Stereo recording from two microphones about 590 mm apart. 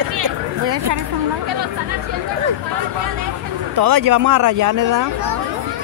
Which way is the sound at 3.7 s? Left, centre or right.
Right.